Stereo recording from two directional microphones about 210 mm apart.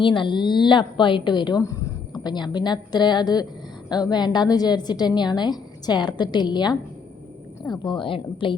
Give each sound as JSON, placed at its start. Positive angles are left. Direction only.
{"t": 0.0, "sound": "a woman's voice", "side_deg": 25}